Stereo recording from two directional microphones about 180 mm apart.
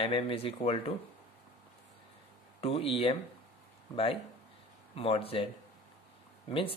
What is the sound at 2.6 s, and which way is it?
Speech, 30° left (ahead or behind).